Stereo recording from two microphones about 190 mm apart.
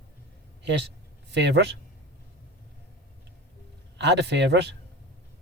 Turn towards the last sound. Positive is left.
turn(degrees=-65)  # may be behind; listen again after turning